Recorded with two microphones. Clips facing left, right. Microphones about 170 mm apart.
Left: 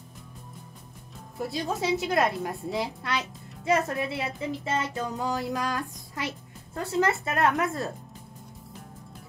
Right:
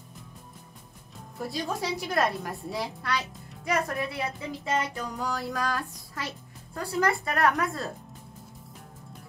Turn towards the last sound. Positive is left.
turn(degrees=20)  # may be behind; listen again after turning